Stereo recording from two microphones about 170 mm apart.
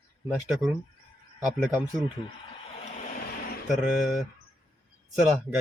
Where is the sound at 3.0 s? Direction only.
55° left (ahead or behind).